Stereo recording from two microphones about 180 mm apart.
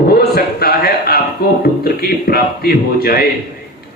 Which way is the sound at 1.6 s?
55° left (ahead or behind).